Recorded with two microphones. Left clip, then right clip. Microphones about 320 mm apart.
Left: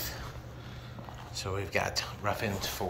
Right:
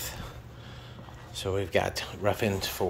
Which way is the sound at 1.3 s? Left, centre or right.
Centre.